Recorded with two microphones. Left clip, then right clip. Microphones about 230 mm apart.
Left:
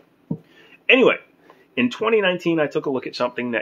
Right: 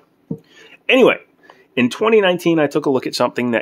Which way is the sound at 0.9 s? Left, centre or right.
Right.